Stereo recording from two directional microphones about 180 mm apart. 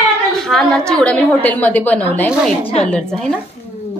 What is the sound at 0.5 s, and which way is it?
A woman's voice, centre (ahead or behind).